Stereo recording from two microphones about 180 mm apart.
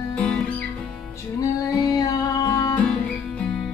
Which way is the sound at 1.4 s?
20° left (ahead or behind).